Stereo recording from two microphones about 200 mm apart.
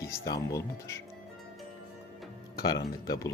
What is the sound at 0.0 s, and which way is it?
Speech, 15° left (ahead or behind).